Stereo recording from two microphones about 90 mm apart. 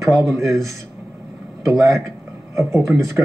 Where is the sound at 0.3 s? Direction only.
35° right (ahead or behind).